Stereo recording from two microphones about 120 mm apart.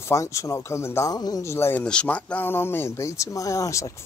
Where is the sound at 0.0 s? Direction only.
25° left (ahead or behind).